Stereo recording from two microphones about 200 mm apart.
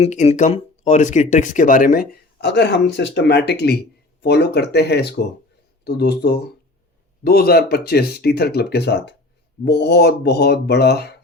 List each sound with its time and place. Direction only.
0.0 s speech: 35° left (ahead or behind); by 11.2 s 55° left (ahead or behind)